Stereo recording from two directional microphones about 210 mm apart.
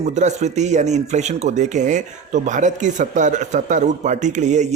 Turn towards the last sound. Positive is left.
turn(degrees=-35)  # may be behind; listen again after turning